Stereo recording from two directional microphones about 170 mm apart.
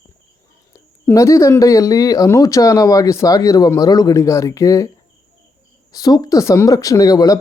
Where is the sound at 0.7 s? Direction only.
20° left (ahead or behind).